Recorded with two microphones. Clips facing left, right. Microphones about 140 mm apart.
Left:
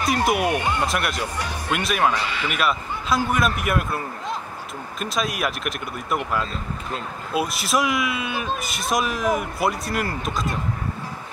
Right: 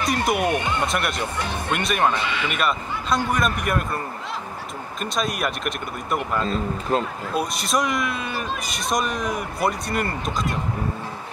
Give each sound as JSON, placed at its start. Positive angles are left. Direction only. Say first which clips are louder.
{"t": 0.0, "sound": "speech", "louder": "left 1 dB", "side_deg": 0}
{"t": 5.0, "sound": "speech", "louder": "even", "side_deg": 0}
{"t": 6.9, "sound": "speech", "louder": "right 10 dB", "side_deg": -45}
{"t": 7.3, "sound": "speech", "louder": "left 1 dB", "side_deg": 5}